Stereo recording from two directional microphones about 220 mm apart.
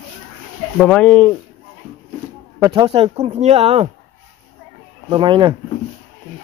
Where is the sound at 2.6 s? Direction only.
20° right (ahead or behind).